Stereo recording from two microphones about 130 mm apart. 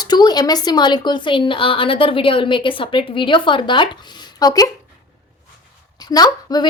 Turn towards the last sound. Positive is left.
turn(degrees=30)  # may be behind; listen again after turning